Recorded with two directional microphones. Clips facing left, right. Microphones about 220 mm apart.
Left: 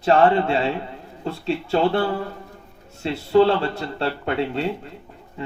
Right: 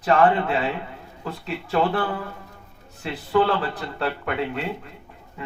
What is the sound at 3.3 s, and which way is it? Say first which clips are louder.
Speech: left 5 dB; 25° left (ahead or behind).